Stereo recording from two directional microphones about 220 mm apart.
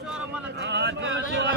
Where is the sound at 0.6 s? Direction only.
50° right (ahead or behind).